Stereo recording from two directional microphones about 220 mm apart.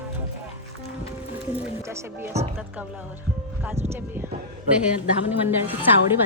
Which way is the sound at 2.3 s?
30° right (ahead or behind).